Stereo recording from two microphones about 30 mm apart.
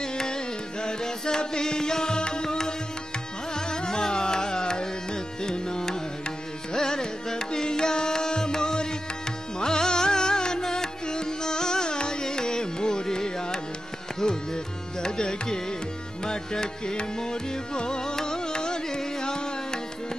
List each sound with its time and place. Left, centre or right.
0.0 s music: left
14.2 s carnatic music: left
16.3 s music: left